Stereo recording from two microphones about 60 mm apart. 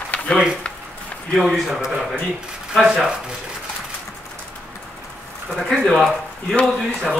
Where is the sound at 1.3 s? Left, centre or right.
Centre.